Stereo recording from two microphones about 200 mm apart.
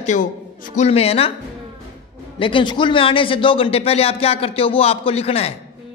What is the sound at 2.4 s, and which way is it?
Speech, 25° left (ahead or behind).